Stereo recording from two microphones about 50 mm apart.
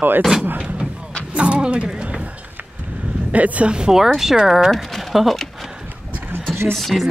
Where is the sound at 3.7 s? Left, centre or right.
Centre.